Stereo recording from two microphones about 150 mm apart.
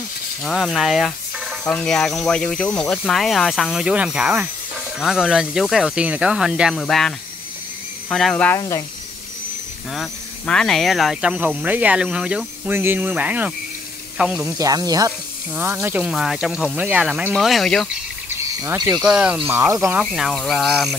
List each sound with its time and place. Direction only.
0.4 s speech: centre (ahead or behind)
8.5 s speech: 25° left (ahead or behind)
9.9 s speech: 5° left (ahead or behind)
14.4 s speech: 25° right (ahead or behind)
15.5 s speech: 10° right (ahead or behind)
18.9 s speech: 5° right (ahead or behind)
20.0 s speech: centre (ahead or behind)